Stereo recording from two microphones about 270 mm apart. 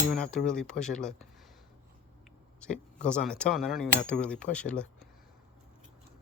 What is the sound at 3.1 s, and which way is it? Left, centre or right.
Speech, centre.